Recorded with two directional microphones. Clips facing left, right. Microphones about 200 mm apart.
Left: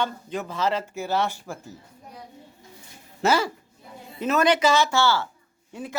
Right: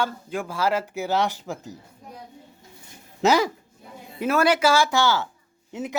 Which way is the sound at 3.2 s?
15° right (ahead or behind).